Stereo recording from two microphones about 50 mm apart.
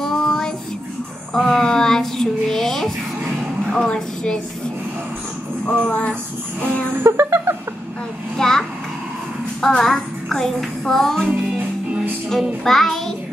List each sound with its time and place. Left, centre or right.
0.0 s child singing: centre
1.3 s a sound: centre
3.7 s a woman's voice: centre
5.7 s a sound: left
6.6 s music: left
7.0 s music: right
8.4 s a sound: centre
9.7 s child singing: centre
12.6 s child singing: centre